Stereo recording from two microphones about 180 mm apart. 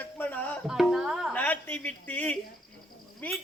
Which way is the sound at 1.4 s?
10° left (ahead or behind).